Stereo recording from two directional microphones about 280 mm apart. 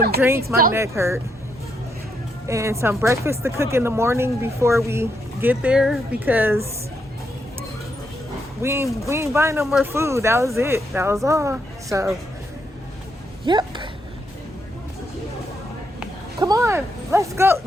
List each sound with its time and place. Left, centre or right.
0.2 s speech: centre
2.5 s speech: centre
8.6 s speech: centre
13.4 s a sound: centre
16.4 s speech: centre